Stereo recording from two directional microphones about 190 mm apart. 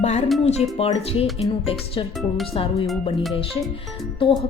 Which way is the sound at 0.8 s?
30° left (ahead or behind).